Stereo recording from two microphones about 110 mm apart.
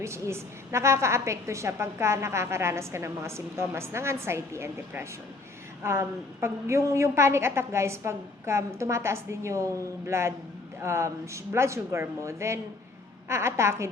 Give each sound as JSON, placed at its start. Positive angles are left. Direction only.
{"t": 0.0, "sound": "a woman's voice", "side_deg": -25}